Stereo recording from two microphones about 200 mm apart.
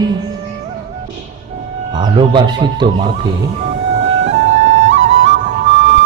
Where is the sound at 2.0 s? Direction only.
25° right (ahead or behind).